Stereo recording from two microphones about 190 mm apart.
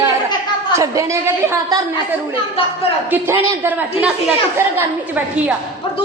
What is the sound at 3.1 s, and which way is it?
A woman's voice, 10° right (ahead or behind).